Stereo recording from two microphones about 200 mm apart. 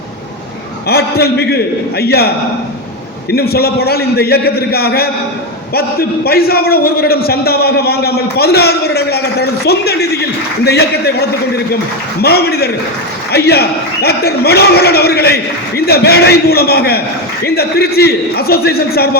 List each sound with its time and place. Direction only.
0.9 s a man's voice: 50° left (ahead or behind)
3.3 s a man's voice: 50° left (ahead or behind)